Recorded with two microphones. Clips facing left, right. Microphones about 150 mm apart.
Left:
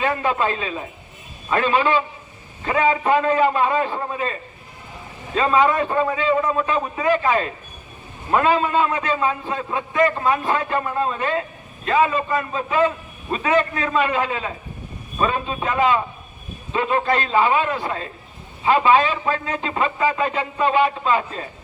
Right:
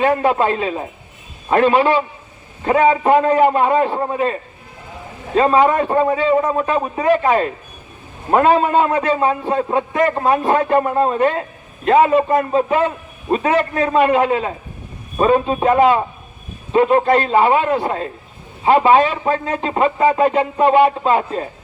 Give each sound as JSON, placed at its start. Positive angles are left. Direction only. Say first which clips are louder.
{"t": 0.0, "sound": "a man's voice", "louder": "right 7 dB", "side_deg": -40}
{"t": 0.3, "sound": "a man's voice", "louder": "right 5 dB", "side_deg": -55}
{"t": 3.0, "sound": "a man's voice", "louder": "right 5 dB", "side_deg": -40}
{"t": 3.8, "sound": "a man's voice", "louder": "right 6 dB", "side_deg": -40}
{"t": 5.9, "sound": "a man's voice", "louder": "right 5 dB", "side_deg": -40}
{"t": 19.2, "sound": "a man's voice", "louder": "right 5 dB", "side_deg": -40}